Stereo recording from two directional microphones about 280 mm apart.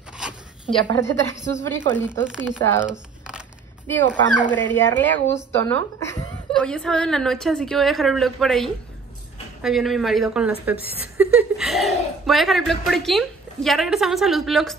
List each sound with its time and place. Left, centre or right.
0.9 s speech: centre
1.3 s a woman's voice: left
1.6 s speech: centre
2.0 s a woman's voice: centre
2.9 s a sound: centre
4.1 s a woman's voice: centre